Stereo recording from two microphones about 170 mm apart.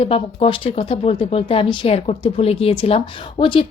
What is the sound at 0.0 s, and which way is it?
Speech, 35° left (ahead or behind).